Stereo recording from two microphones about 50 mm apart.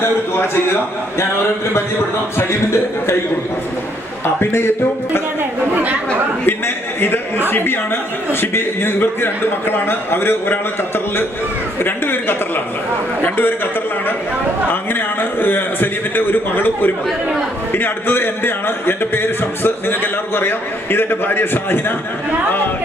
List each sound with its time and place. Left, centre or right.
4.4 s a man's voice: left
5.7 s chatter: right
7.0 s a man's voice: left
14.7 s a man's voice: left